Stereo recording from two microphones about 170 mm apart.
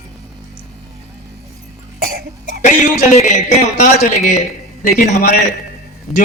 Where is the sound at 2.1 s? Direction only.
65° right (ahead or behind).